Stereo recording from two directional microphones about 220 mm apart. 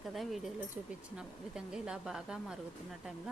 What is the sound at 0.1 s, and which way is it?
Speech, centre (ahead or behind).